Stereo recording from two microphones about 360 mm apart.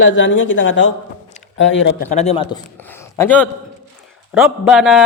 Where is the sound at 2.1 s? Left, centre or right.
Centre.